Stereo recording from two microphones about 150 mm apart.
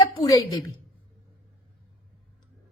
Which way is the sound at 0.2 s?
25° left (ahead or behind).